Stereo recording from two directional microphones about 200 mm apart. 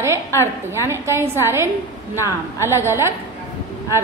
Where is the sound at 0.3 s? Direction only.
15° left (ahead or behind).